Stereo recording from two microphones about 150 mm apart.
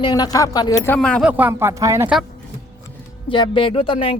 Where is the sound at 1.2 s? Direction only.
10° right (ahead or behind).